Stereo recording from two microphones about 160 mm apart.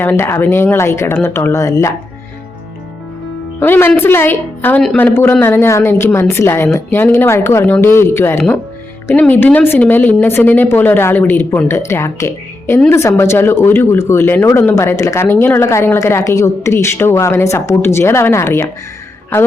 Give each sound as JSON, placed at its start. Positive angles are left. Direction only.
{"t": 0.0, "sound": "speech", "side_deg": 15}
{"t": 3.6, "sound": "speech", "side_deg": 15}